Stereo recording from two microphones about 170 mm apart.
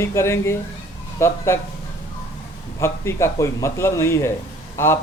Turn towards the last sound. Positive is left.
turn(degrees=15)  # may be behind; listen again after turning